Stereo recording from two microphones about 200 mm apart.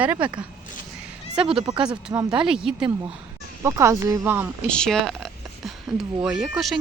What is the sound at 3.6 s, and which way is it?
Speech, 15° right (ahead or behind).